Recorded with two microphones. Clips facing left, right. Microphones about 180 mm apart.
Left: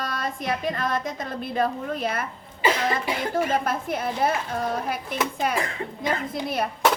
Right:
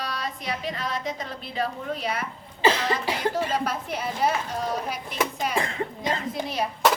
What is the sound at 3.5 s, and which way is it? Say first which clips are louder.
Speech: left 3 dB; 50° left (ahead or behind).